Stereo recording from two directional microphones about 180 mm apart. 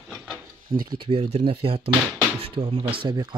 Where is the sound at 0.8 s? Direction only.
25° right (ahead or behind).